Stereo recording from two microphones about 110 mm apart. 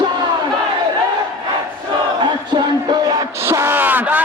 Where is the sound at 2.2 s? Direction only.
40° right (ahead or behind).